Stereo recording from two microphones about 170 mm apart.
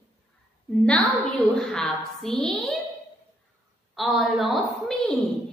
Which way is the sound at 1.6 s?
Centre (ahead or behind).